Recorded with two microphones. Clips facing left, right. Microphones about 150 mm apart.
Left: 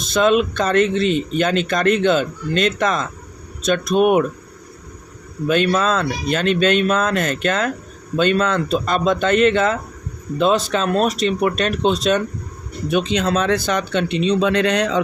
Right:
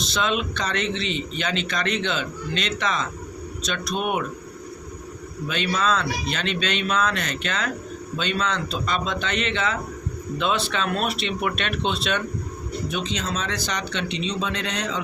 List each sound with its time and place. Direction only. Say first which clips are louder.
0.0 s speech: left 9 dB; 50° left (ahead or behind)
5.5 s speech: left 7 dB; 50° left (ahead or behind)
12.9 s speech: left 12 dB; 60° left (ahead or behind)